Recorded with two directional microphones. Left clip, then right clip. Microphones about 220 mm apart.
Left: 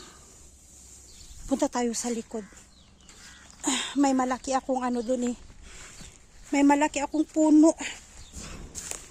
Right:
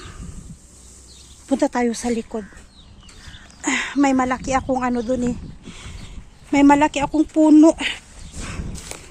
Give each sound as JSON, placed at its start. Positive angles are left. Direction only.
{"t": 1.5, "sound": "speech", "side_deg": 15}
{"t": 3.6, "sound": "speech", "side_deg": 25}
{"t": 7.2, "sound": "walk", "side_deg": 10}